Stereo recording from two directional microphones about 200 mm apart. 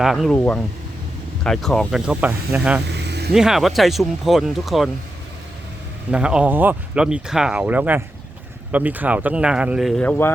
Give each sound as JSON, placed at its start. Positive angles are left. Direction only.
{"t": 0.0, "sound": "speech", "side_deg": 0}
{"t": 2.8, "sound": "vehicle", "side_deg": -55}
{"t": 3.3, "sound": "speech", "side_deg": 0}
{"t": 6.1, "sound": "speech", "side_deg": -5}
{"t": 10.0, "sound": "speech", "side_deg": 10}